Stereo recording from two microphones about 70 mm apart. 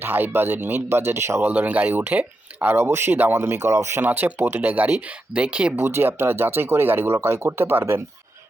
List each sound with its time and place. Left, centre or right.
0.0 s speech: right
1.5 s speech: right
4.0 s speech: right
5.7 s speech: right